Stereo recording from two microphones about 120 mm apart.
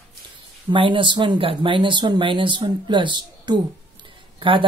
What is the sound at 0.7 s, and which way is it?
Speech, 45° right (ahead or behind).